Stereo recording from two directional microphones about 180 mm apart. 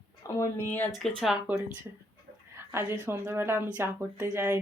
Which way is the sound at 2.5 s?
15° right (ahead or behind).